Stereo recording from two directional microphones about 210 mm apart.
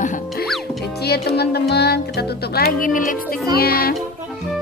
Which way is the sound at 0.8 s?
50° left (ahead or behind).